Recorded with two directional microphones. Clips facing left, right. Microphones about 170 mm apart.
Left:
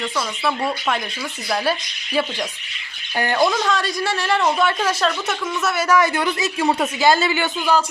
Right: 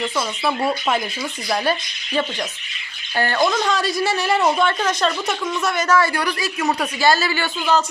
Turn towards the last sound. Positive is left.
turn(degrees=15)  # may be behind; listen again after turning